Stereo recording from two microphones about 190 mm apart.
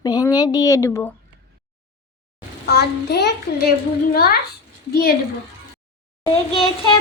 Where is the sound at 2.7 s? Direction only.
60° left (ahead or behind).